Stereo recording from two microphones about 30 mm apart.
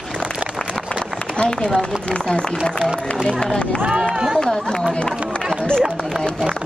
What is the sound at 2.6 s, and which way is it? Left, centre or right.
Speech, right.